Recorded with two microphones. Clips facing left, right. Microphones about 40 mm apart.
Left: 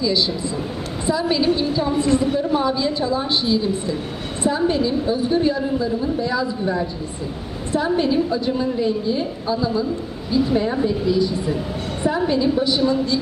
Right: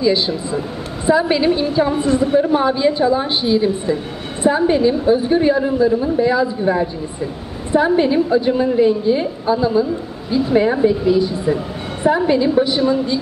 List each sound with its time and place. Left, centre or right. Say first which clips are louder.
0.0 s a woman's voice: right 4 dB; right